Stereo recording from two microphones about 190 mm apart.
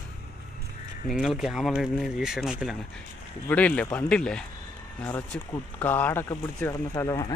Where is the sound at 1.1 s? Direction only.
Centre (ahead or behind).